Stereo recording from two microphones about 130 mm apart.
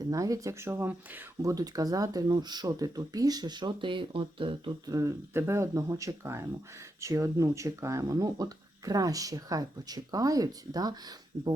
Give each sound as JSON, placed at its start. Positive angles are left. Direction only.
{"t": 0.0, "sound": "speech", "side_deg": -25}
{"t": 1.4, "sound": "speech", "side_deg": -25}
{"t": 4.9, "sound": "speech", "side_deg": -25}